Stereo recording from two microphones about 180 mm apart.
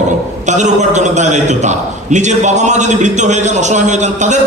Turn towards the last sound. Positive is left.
turn(degrees=-40)  # may be behind; listen again after turning